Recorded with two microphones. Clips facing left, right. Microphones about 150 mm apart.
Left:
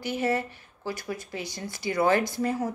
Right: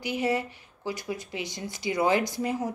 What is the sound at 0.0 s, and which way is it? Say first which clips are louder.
A woman's voice: even; 15° right (ahead or behind).